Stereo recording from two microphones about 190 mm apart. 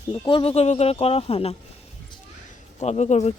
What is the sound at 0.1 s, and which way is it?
Speech, 25° left (ahead or behind).